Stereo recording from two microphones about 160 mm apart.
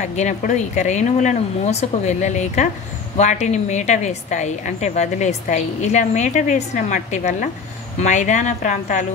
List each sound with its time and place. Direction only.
0.0 s a woman's voice: 50° left (ahead or behind)